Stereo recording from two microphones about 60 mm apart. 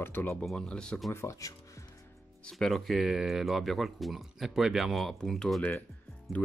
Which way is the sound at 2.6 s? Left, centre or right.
Centre.